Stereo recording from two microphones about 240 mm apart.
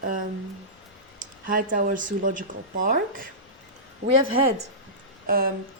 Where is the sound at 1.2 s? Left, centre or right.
Right.